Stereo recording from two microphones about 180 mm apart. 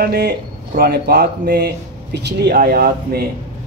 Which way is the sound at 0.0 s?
60° right (ahead or behind).